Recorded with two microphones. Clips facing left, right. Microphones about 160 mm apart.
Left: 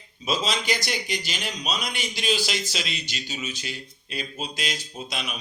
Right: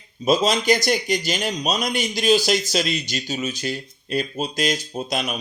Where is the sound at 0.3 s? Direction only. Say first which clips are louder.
Right 8 dB; 45° right (ahead or behind).